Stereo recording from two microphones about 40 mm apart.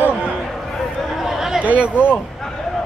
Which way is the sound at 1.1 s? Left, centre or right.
Centre.